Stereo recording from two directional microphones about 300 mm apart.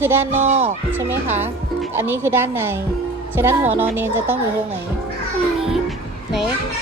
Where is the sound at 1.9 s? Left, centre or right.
Centre.